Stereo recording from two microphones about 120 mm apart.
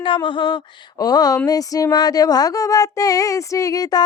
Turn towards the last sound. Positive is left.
turn(degrees=30)  # may be behind; listen again after turning